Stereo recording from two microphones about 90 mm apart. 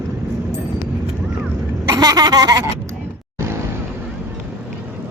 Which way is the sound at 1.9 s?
50° right (ahead or behind).